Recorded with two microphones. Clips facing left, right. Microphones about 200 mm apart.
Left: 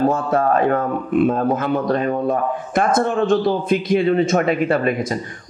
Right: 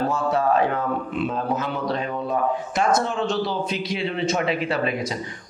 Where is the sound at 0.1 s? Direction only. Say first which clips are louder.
Left 3 dB; 50° left (ahead or behind).